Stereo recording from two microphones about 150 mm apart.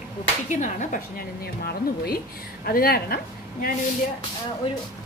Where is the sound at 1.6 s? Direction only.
90° left.